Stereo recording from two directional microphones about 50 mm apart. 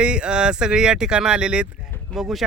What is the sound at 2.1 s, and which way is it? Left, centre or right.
Speech, centre.